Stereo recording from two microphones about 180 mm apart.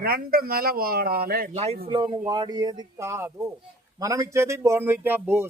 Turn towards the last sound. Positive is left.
turn(degrees=-10)  # may be behind; listen again after turning